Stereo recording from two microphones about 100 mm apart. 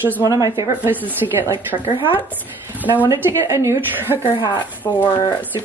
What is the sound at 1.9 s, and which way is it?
Speech, 60° left (ahead or behind).